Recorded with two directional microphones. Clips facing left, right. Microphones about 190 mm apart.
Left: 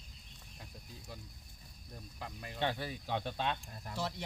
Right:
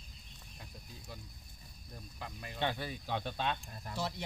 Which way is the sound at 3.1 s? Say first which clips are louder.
Even; 15° left (ahead or behind).